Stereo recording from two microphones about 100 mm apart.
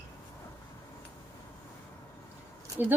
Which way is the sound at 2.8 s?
20° right (ahead or behind).